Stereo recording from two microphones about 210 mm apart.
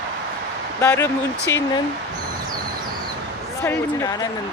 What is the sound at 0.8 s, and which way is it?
Speech, 15° left (ahead or behind).